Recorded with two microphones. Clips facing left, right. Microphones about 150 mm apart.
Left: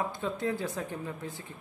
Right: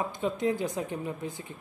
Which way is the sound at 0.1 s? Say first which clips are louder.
Right 4 dB; 15° right (ahead or behind).